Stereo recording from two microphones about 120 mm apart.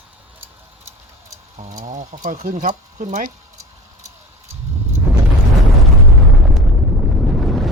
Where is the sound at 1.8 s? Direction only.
85° right.